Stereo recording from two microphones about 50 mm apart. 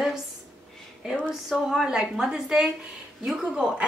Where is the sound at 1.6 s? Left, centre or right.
Centre.